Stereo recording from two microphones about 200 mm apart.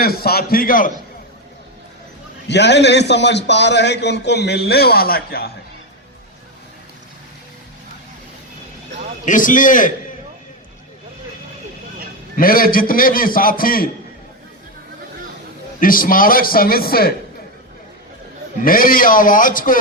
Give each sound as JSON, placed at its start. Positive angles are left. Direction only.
{"t": 0.0, "sound": "a man's voice", "side_deg": 50}
{"t": 2.5, "sound": "a man's voice", "side_deg": 60}
{"t": 9.2, "sound": "a man's voice", "side_deg": 40}
{"t": 12.4, "sound": "a man's voice", "side_deg": 45}
{"t": 15.8, "sound": "a man's voice", "side_deg": 45}
{"t": 18.6, "sound": "a man's voice", "side_deg": 45}